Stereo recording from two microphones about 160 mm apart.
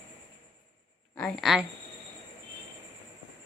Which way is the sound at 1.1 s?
5° left (ahead or behind).